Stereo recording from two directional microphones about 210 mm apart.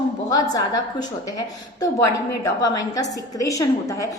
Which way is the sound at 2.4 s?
15° left (ahead or behind).